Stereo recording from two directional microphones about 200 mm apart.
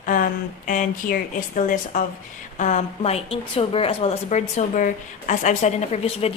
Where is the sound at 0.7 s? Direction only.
40° left (ahead or behind).